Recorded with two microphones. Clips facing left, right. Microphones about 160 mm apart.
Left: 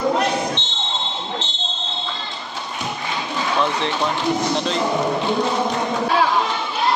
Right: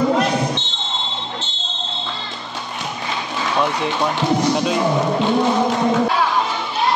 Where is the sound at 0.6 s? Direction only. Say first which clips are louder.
Right 2 dB; 20° left (ahead or behind).